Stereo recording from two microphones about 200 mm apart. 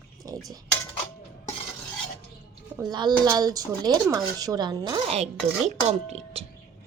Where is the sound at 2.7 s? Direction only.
20° right (ahead or behind).